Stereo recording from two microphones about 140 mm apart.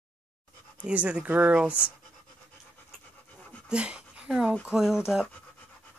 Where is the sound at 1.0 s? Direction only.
10° right (ahead or behind).